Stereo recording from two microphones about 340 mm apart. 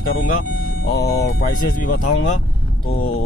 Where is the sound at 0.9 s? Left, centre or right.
Left.